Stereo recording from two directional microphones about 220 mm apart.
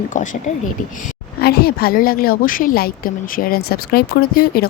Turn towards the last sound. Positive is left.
turn(degrees=45)  # may be behind; listen again after turning